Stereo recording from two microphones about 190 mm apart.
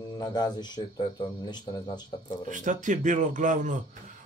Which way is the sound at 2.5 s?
40° right (ahead or behind).